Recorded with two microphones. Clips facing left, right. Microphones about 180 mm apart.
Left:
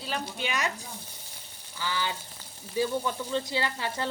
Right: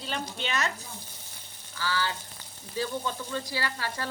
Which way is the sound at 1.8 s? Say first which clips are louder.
Right 1 dB; 15° left (ahead or behind).